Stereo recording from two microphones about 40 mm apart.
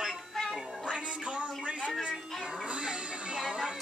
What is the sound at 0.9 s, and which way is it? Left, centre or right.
Speech, right.